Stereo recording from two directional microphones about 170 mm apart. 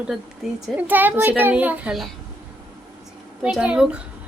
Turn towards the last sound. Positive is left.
turn(degrees=-5)  # may be behind; listen again after turning